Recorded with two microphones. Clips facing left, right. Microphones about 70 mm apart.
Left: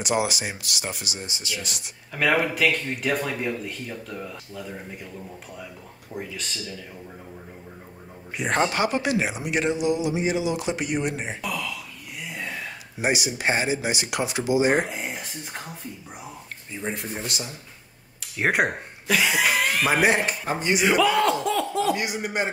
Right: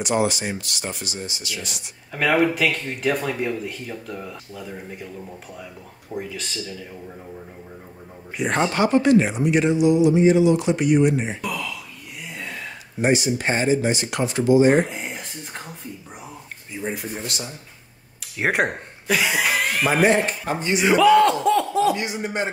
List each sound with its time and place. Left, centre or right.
0.0 s speech: centre
1.2 s speech: left
1.6 s speech: centre
6.1 s speech: centre
8.4 s speech: centre
13.0 s speech: centre
18.4 s speech: centre
22.1 s speech: centre